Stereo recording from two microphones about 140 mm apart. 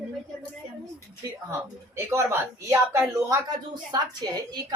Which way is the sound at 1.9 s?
20° right (ahead or behind).